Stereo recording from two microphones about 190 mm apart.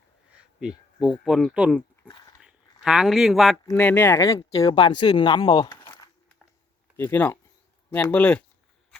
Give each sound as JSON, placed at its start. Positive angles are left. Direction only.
{"t": 0.3, "sound": "speech", "side_deg": -5}
{"t": 6.9, "sound": "speech", "side_deg": 10}